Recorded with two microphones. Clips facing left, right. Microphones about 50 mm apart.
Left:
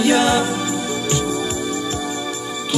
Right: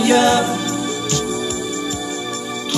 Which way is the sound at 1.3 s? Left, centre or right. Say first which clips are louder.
Even; left.